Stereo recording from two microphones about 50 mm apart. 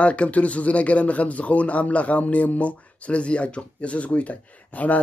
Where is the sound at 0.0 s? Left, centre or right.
Left.